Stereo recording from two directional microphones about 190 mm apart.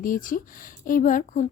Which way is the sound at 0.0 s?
45° left (ahead or behind).